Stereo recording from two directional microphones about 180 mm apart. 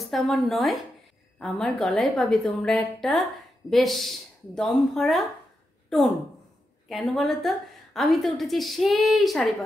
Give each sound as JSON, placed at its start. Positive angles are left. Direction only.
{"t": 0.0, "sound": "a woman's voice", "side_deg": 0}